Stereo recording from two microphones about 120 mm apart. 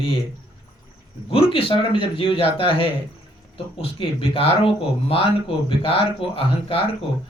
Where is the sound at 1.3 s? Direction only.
50° left (ahead or behind).